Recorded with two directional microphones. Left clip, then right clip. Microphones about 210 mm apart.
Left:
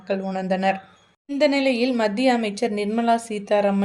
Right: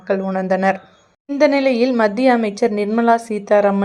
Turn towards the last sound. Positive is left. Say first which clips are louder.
# right 6 dB
turn(degrees=-20)  # may be behind; listen again after turning